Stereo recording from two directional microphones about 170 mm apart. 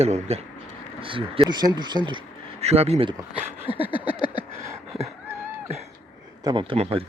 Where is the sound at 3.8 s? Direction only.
30° left (ahead or behind).